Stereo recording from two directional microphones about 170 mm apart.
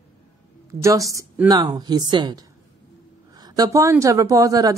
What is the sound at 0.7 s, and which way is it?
Speech, 20° right (ahead or behind).